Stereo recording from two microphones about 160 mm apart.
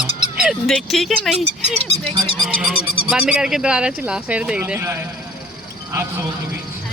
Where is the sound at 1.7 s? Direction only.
40° right (ahead or behind).